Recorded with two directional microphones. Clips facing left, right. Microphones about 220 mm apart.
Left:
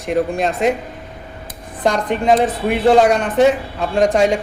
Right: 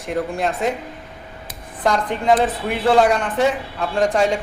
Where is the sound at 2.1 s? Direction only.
20° left (ahead or behind).